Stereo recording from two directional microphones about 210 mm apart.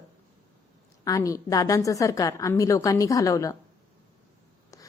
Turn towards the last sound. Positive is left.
turn(degrees=15)  # may be behind; listen again after turning